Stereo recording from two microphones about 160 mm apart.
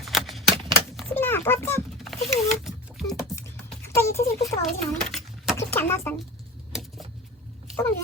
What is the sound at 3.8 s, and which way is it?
Speech, 15° left (ahead or behind).